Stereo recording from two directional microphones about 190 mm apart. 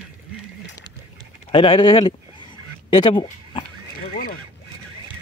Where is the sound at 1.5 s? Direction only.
25° left (ahead or behind).